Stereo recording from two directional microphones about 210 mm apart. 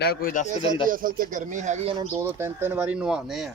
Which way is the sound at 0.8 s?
40° right (ahead or behind).